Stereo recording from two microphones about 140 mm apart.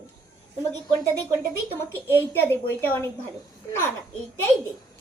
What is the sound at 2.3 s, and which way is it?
Speech, 15° left (ahead or behind).